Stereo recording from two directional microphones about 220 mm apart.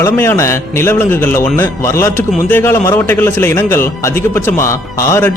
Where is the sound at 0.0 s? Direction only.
10° left (ahead or behind).